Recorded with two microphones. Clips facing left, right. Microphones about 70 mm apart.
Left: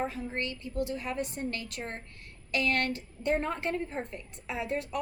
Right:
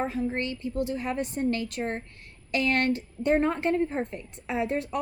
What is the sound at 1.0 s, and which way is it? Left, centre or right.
A woman's voice, right.